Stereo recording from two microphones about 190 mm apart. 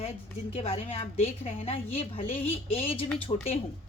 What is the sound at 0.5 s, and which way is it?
A woman's voice, 35° left (ahead or behind).